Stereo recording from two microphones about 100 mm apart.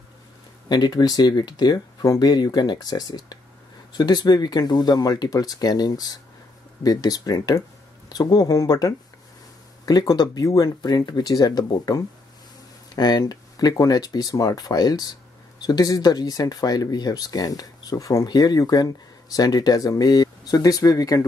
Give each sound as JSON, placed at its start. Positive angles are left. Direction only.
{"t": 0.7, "sound": "speech", "side_deg": 45}